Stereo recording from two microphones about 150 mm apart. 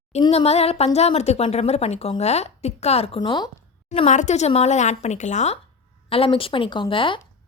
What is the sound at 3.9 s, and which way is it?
A woman's voice, 50° left (ahead or behind).